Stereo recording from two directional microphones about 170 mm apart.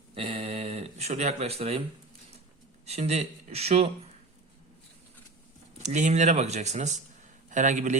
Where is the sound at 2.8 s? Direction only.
40° right (ahead or behind).